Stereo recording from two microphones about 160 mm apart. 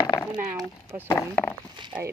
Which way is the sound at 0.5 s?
15° right (ahead or behind).